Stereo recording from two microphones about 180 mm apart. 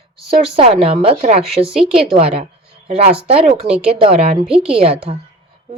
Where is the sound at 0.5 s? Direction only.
35° right (ahead or behind).